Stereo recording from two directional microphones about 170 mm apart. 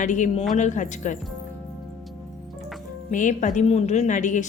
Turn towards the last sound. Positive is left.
turn(degrees=45)  # may be behind; listen again after turning